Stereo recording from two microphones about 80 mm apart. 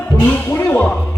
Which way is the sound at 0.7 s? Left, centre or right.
Centre.